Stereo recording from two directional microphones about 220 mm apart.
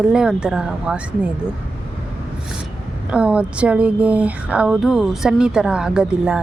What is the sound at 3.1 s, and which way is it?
Speech, 5° right (ahead or behind).